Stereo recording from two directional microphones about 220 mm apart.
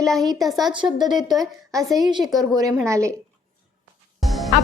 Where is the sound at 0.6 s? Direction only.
20° right (ahead or behind).